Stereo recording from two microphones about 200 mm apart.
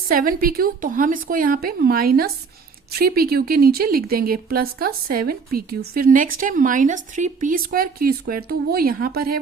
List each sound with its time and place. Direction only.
0.1 s speech: 45° right (ahead or behind)